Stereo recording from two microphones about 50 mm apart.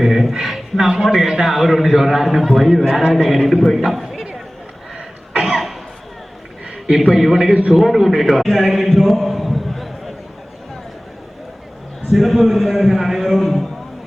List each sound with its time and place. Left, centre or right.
0.0 s a sound: centre
1.1 s a man's voice: centre
5.4 s cough: centre
6.8 s a man's voice: centre
12.1 s a man's voice: centre